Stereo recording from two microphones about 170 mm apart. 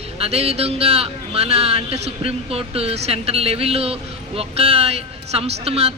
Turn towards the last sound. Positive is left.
turn(degrees=-35)  # may be behind; listen again after turning